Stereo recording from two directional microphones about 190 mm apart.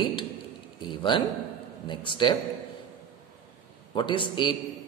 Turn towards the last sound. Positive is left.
turn(degrees=25)  # may be behind; listen again after turning